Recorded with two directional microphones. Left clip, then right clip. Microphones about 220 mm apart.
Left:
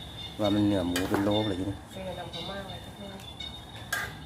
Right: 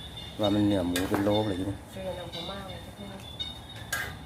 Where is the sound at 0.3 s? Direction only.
Centre (ahead or behind).